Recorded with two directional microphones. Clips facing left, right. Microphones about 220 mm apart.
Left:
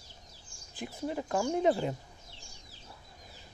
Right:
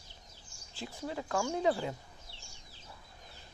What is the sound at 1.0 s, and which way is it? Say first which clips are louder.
Speech: left 3 dB; 20° left (ahead or behind).